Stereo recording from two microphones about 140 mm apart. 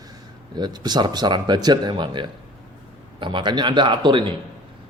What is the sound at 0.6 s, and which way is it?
A man's voice, 30° right (ahead or behind).